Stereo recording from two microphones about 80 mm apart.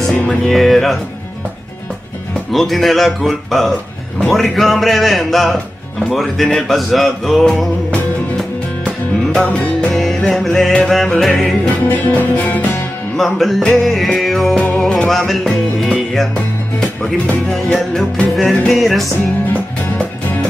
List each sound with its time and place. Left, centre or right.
0.1 s music: centre
0.5 s speech: centre
2.5 s speech: centre
8.4 s music: centre
10.9 s speech: centre
11.9 s music: centre
13.1 s speech: centre
17.0 s music: centre
18.3 s speech: centre